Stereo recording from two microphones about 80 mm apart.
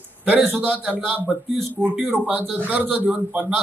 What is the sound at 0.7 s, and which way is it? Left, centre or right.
Speech, centre.